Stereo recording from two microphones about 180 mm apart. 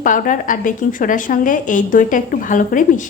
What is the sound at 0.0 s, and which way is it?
A woman's voice, 45° left (ahead or behind).